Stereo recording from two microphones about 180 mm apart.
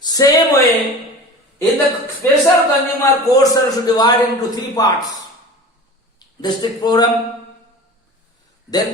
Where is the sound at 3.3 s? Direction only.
20° left (ahead or behind).